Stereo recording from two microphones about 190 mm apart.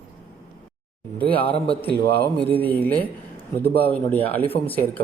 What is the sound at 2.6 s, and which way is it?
Speech, 10° left (ahead or behind).